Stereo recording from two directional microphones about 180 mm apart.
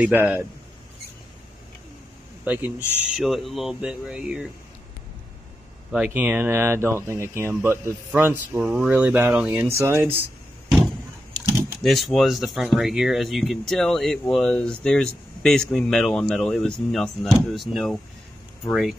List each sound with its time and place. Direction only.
0.0 s speech: 10° right (ahead or behind)
2.4 s speech: 10° right (ahead or behind)
5.9 s speech: 5° right (ahead or behind)
11.3 s speech: centre (ahead or behind)